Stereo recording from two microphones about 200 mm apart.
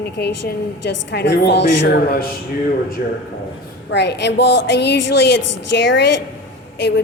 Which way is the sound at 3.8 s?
55° left (ahead or behind).